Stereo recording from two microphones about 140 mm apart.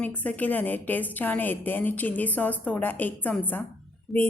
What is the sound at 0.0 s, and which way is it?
A woman's voice, 10° left (ahead or behind).